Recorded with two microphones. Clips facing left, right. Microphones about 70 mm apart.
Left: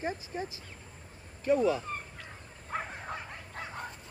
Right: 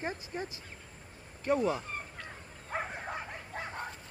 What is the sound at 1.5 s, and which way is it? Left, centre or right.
Speech, right.